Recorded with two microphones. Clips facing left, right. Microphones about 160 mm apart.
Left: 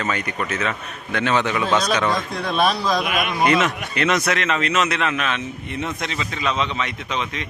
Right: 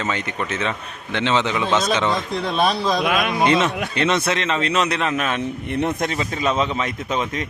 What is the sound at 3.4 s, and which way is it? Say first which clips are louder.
Speech: left 1 dB; 30° right (ahead or behind).